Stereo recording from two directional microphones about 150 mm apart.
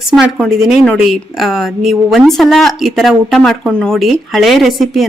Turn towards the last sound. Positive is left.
turn(degrees=0)  # may be behind; listen again after turning